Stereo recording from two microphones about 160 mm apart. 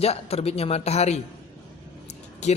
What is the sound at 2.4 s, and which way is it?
Speech, 45° left (ahead or behind).